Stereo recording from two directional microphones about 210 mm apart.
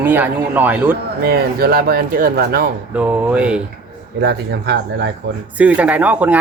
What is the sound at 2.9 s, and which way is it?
Speech, 5° right (ahead or behind).